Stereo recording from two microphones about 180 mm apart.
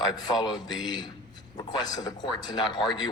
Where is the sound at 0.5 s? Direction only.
25° left (ahead or behind).